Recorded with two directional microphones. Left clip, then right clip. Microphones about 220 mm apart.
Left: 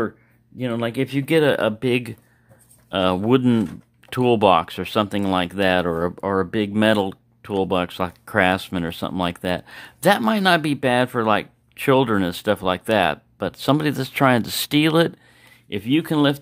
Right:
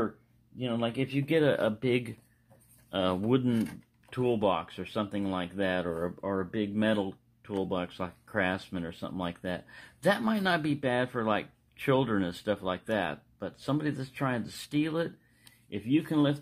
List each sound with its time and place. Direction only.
0.6 s speech: 50° left (ahead or behind)